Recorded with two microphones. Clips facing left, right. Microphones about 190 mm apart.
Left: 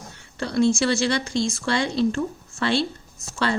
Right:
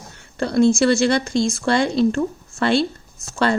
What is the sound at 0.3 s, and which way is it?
A woman's voice, 50° right (ahead or behind).